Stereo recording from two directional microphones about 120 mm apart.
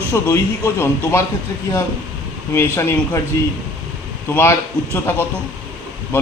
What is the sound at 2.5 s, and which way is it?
Speech, 20° left (ahead or behind).